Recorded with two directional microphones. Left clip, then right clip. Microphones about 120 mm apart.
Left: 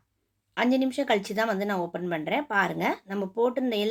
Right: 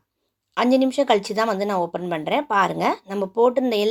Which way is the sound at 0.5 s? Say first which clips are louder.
Right 7 dB; 30° right (ahead or behind).